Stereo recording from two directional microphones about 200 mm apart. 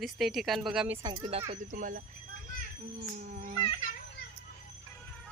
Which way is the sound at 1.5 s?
40° right (ahead or behind).